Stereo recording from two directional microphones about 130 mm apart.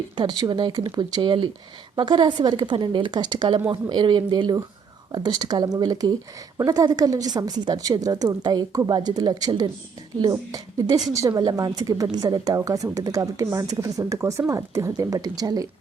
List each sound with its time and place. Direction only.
0.2 s a woman's voice: 35° right (ahead or behind)